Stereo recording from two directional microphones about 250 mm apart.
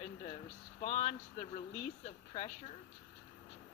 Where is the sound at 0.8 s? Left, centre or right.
Left.